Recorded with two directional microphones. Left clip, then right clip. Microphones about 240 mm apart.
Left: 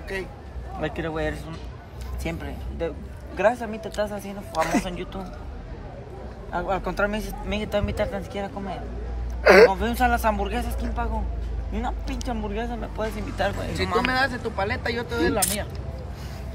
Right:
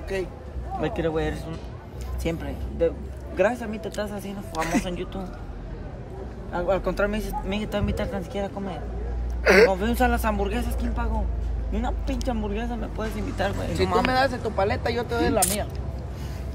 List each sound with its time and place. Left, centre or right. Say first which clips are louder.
0.7 s speech: right 3 dB; centre
4.1 s speech: left 2 dB; centre
4.8 s speech: right 1 dB; centre
6.5 s speech: right 2 dB; centre
9.4 s speech: left 3 dB; centre
9.7 s speech: left 1 dB; centre
12.3 s speech: left 1 dB; centre
13.7 s speech: right 2 dB; centre